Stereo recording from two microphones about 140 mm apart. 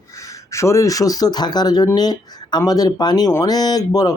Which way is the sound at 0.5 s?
20° left (ahead or behind).